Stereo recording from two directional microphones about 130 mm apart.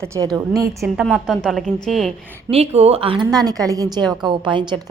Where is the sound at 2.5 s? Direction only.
50° right (ahead or behind).